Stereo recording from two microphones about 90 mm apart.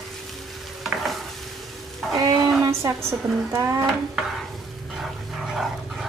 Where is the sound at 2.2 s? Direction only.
45° right (ahead or behind).